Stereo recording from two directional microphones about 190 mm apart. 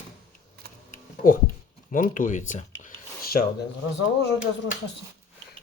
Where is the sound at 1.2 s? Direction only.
50° left (ahead or behind).